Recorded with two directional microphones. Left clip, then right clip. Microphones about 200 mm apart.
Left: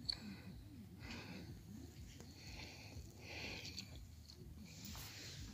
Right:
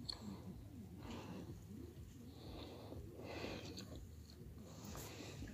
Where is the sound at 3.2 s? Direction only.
20° right (ahead or behind).